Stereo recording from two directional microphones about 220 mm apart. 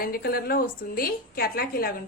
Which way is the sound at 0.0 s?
45° left (ahead or behind).